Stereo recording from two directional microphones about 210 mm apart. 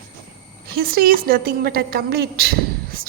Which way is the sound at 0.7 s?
45° right (ahead or behind).